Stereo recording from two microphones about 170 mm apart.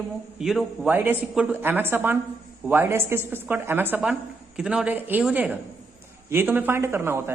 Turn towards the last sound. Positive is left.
turn(degrees=-15)  # may be behind; listen again after turning